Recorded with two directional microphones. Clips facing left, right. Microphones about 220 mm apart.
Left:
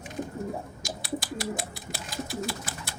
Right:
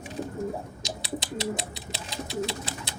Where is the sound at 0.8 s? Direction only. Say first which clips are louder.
Left 1 dB; 20° right (ahead or behind).